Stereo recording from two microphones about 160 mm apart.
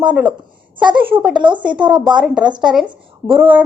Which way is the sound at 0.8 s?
30° right (ahead or behind).